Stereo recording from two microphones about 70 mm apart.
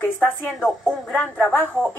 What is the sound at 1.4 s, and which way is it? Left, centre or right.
Speech, left.